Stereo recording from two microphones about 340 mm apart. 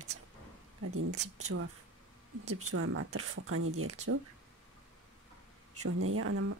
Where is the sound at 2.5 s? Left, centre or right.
Right.